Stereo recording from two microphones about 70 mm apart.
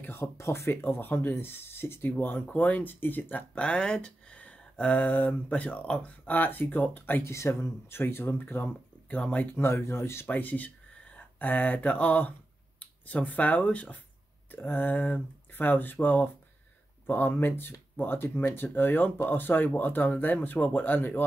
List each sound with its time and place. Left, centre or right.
0.0 s speech: left
7.2 s speech: left
9.6 s speech: left
10.2 s speech: left